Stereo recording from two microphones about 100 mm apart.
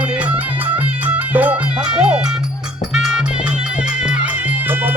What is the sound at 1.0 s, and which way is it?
Music, 15° right (ahead or behind).